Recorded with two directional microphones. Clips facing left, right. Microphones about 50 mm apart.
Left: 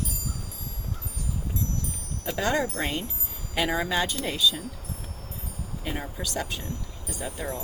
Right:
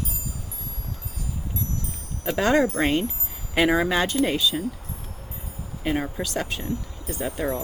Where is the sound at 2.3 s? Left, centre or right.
Right.